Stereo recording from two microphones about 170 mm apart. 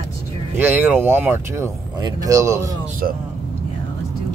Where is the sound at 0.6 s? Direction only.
10° right (ahead or behind).